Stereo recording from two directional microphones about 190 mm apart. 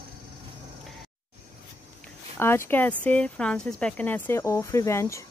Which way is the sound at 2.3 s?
10° left (ahead or behind).